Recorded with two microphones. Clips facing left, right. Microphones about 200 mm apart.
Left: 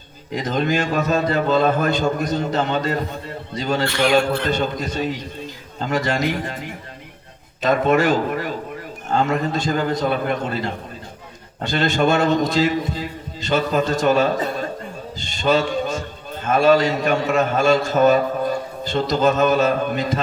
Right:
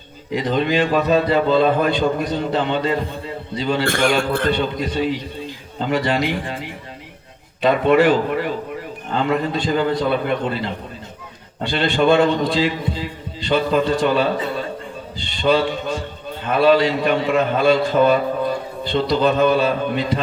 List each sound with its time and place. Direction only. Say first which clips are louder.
0.3 s a man's voice: right 2 dB; 45° left (ahead or behind)
3.8 s speech: right 1 dB; 50° right (ahead or behind)
4.4 s a man's voice: right 2 dB; 45° left (ahead or behind)